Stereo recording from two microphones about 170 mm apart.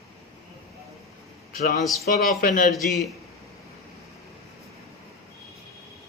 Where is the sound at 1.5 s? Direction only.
60° left (ahead or behind).